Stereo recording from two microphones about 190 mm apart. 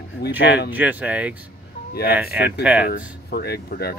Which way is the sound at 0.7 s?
10° right (ahead or behind).